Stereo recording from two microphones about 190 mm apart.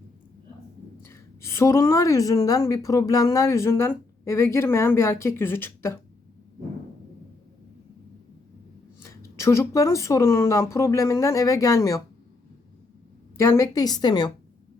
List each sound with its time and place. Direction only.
1.0 s a woman's voice: 15° left (ahead or behind)
9.0 s a woman's voice: 15° left (ahead or behind)
13.4 s a woman's voice: 15° left (ahead or behind)